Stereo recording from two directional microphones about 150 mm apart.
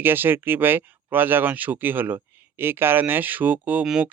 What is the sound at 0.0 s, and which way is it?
Speech, 15° right (ahead or behind).